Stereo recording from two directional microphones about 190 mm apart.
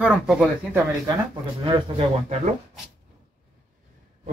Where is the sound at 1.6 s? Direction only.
25° right (ahead or behind).